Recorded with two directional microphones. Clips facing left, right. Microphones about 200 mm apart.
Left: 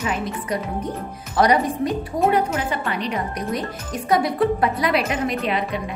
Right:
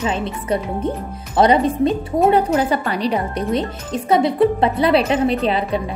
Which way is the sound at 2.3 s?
35° right (ahead or behind).